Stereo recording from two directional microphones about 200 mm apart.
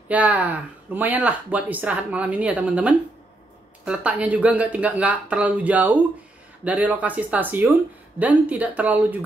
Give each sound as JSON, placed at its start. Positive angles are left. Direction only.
{"t": 0.1, "sound": "speech", "side_deg": -5}